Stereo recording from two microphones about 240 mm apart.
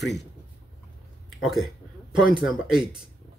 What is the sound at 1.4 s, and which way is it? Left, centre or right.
Speech, centre.